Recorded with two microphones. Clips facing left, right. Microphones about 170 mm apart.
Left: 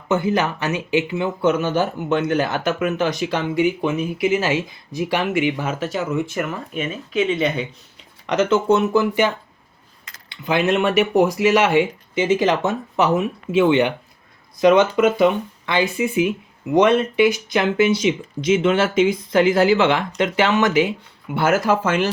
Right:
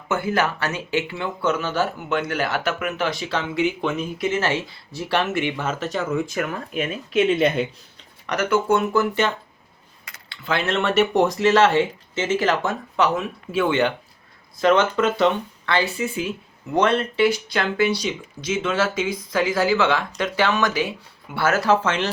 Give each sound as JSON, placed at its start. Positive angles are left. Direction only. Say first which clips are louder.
{"t": 0.1, "sound": "speech", "louder": "left 3 dB", "side_deg": 20}
{"t": 8.3, "sound": "speech", "louder": "left 3 dB", "side_deg": 20}